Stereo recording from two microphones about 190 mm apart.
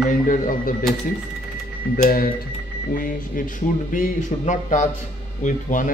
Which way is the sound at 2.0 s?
50° left (ahead or behind).